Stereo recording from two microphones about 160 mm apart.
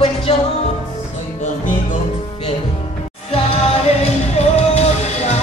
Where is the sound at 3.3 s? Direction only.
40° left (ahead or behind).